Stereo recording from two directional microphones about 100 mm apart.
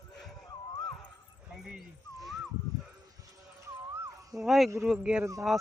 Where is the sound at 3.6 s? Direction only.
30° right (ahead or behind).